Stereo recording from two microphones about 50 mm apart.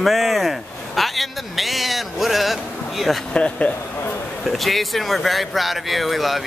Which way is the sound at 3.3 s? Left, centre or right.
Left.